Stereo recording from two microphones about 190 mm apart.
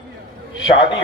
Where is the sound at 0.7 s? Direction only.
25° left (ahead or behind).